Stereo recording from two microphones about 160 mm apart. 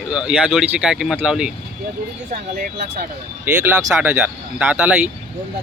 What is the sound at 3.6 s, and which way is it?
Speech, 10° right (ahead or behind).